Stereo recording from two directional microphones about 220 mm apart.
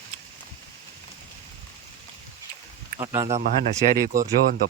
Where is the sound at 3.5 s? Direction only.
40° right (ahead or behind).